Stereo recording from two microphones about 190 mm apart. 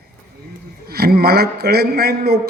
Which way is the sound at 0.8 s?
55° right (ahead or behind).